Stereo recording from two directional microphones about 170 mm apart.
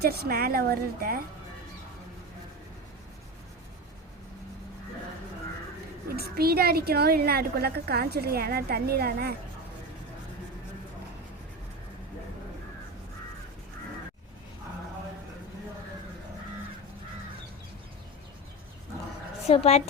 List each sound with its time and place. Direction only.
0.0 s a woman's voice: 70° right (ahead or behind)
6.1 s a woman's voice: 65° right (ahead or behind)
19.5 s speech: 40° left (ahead or behind)